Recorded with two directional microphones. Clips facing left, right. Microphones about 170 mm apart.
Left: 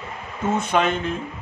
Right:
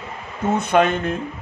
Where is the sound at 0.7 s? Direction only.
55° right (ahead or behind).